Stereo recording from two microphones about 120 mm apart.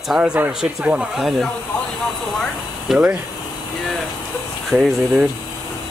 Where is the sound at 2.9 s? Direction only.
10° right (ahead or behind).